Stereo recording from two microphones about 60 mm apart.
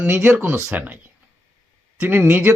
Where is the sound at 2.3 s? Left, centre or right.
Right.